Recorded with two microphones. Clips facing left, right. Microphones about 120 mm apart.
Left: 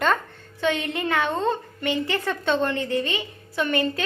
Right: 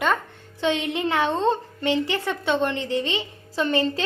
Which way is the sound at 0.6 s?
25° right (ahead or behind).